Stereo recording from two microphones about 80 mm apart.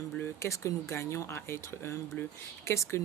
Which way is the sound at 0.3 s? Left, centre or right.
Left.